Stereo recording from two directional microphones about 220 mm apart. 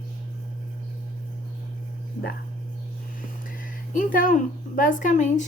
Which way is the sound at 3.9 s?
35° left (ahead or behind).